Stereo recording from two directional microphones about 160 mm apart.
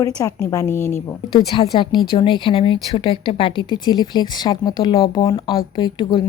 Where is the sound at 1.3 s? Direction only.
30° left (ahead or behind).